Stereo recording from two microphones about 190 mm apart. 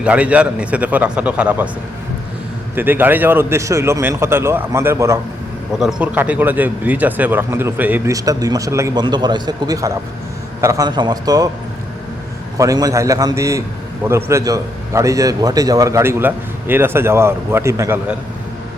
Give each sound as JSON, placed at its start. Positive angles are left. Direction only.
{"t": 0.0, "sound": "a man's voice", "side_deg": -5}
{"t": 2.7, "sound": "a man's voice", "side_deg": -10}
{"t": 12.5, "sound": "a man's voice", "side_deg": -20}